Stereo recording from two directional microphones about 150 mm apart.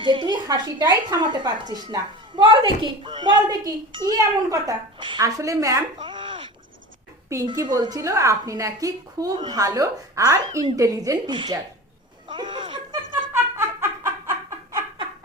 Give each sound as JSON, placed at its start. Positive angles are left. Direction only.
{"t": 0.0, "sound": "speech", "side_deg": -35}
{"t": 11.3, "sound": "speech", "side_deg": -35}
{"t": 13.3, "sound": "a sound", "side_deg": -15}